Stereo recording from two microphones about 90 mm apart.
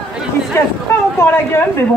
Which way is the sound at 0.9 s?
30° left (ahead or behind).